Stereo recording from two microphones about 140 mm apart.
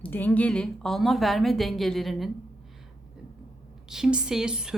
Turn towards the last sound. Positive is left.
turn(degrees=-5)  # may be behind; listen again after turning